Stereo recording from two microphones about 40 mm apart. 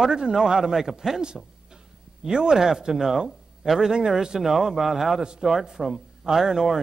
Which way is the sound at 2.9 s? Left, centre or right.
Centre.